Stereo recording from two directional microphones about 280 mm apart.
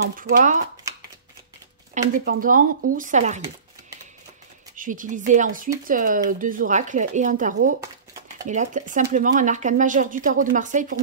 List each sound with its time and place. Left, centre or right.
0.1 s speech: right
2.0 s speech: right
4.7 s speech: right